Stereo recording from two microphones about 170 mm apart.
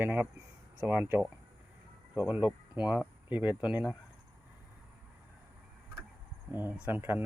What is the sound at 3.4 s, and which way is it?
Speech, 25° left (ahead or behind).